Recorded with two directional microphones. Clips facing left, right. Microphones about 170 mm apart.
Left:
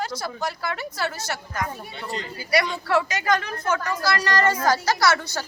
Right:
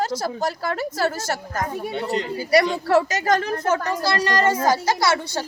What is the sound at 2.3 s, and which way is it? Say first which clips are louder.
A woman's voice: right 5 dB; 40° right (ahead or behind).